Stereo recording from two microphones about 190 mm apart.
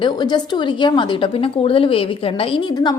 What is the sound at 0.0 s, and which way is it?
A woman's voice, 25° left (ahead or behind).